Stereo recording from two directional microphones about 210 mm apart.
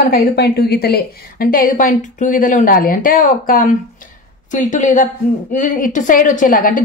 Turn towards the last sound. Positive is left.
turn(degrees=40)  # may be behind; listen again after turning